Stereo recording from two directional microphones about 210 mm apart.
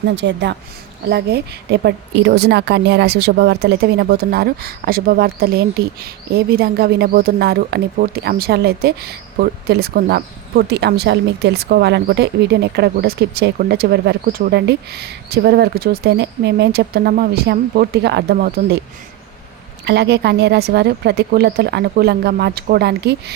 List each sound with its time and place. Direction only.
0.0 s a woman's voice: 55° right (ahead or behind)
19.8 s a woman's voice: 55° right (ahead or behind)